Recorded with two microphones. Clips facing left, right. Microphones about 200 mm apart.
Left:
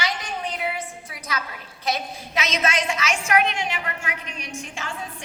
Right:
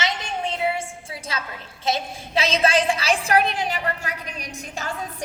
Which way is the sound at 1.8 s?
30° right (ahead or behind).